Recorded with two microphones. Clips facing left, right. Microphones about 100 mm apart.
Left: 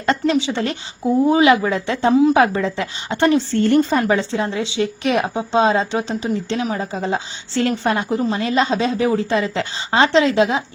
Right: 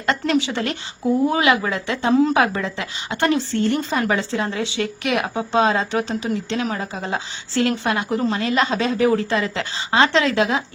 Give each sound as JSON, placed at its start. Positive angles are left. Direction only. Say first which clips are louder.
{"t": 0.0, "sound": "speech", "louder": "left 2 dB", "side_deg": 25}